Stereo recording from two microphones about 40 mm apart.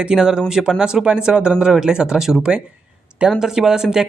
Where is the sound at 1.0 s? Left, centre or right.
Right.